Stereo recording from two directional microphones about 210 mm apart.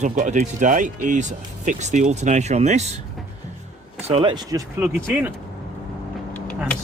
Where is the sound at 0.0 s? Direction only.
35° right (ahead or behind).